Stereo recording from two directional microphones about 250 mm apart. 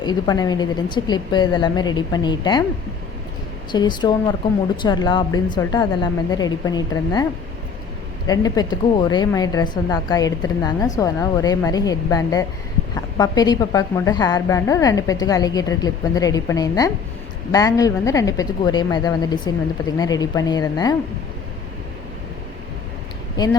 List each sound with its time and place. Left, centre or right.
0.0 s a woman's voice: centre
3.7 s a woman's voice: centre
8.3 s a woman's voice: centre